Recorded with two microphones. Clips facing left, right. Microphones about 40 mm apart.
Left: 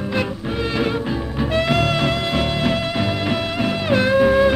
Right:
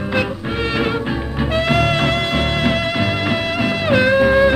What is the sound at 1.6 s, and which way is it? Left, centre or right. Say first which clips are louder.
Music: right 3 dB; right.